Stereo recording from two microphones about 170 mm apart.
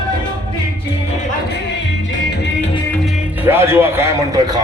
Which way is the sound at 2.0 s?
85° left.